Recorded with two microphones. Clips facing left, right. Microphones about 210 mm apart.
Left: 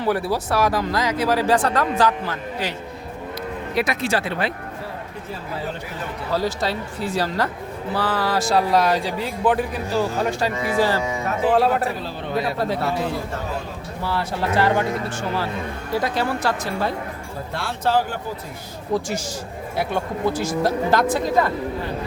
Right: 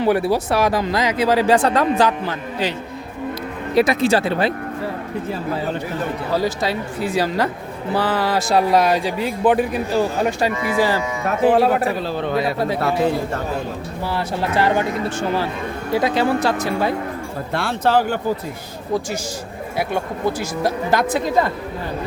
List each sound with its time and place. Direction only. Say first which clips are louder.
0.0 s speech: right 5 dB; 20° right (ahead or behind)
3.8 s speech: right 7 dB; 30° right (ahead or behind)
6.3 s speech: right 1 dB; 15° right (ahead or behind)
14.0 s speech: right 1 dB; 15° right (ahead or behind)
15.9 s speech: right 5 dB; 20° right (ahead or behind)
17.5 s speech: right 4 dB; 65° right (ahead or behind)
19.7 s speech: right 1 dB; 10° right (ahead or behind)